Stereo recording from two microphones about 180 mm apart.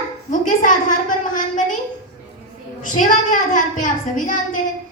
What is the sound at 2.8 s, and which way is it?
A woman's voice, 45° left (ahead or behind).